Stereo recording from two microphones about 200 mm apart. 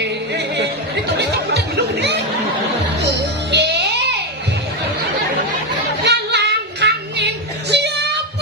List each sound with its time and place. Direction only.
0.0 s music: 55° right (ahead or behind)
1.2 s a sound: 55° right (ahead or behind)
3.5 s music: 55° right (ahead or behind)
6.1 s music: 60° right (ahead or behind)